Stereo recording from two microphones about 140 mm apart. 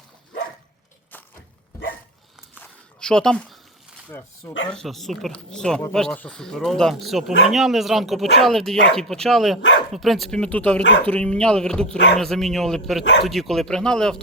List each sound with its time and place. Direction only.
3.0 s speech: 5° left (ahead or behind)
4.1 s speech: 15° left (ahead or behind)
4.7 s speech: centre (ahead or behind)